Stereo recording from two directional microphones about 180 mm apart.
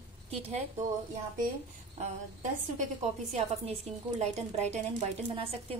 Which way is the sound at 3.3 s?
35° right (ahead or behind).